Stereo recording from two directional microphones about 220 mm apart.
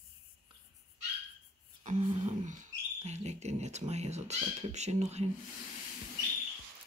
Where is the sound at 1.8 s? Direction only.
30° right (ahead or behind).